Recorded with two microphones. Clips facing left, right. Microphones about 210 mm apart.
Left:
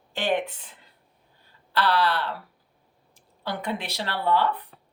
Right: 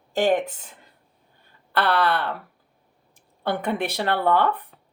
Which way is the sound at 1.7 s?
55° right (ahead or behind).